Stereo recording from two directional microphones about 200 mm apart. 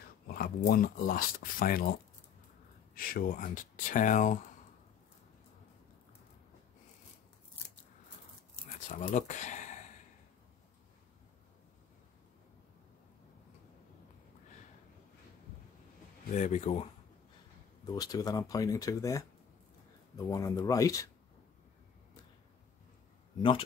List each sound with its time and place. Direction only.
0.3 s speech: 50° left (ahead or behind)
2.9 s speech: 45° left (ahead or behind)
8.8 s speech: 40° left (ahead or behind)
16.3 s speech: 35° left (ahead or behind)
17.8 s speech: 20° left (ahead or behind)